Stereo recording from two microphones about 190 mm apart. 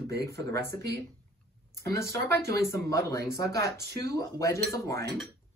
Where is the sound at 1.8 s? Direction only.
15° left (ahead or behind).